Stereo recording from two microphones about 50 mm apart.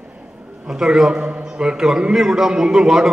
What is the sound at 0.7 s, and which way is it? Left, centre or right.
A man's voice, centre.